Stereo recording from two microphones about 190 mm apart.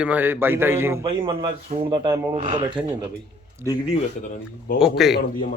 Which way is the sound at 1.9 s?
25° right (ahead or behind).